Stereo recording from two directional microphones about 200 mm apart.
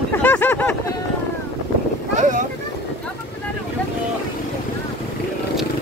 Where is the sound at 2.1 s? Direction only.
40° right (ahead or behind).